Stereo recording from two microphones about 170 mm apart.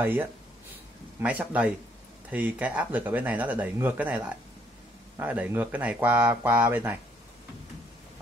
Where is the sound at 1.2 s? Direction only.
10° right (ahead or behind).